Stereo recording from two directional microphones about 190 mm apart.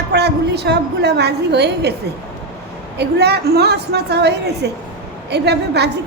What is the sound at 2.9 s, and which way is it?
A woman's voice, 60° right (ahead or behind).